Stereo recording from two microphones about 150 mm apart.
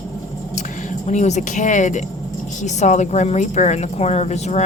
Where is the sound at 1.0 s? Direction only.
50° left (ahead or behind).